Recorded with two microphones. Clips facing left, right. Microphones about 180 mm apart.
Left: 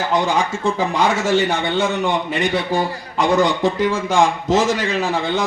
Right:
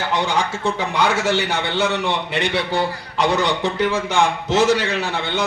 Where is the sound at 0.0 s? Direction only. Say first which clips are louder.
Left 2 dB; 70° right (ahead or behind).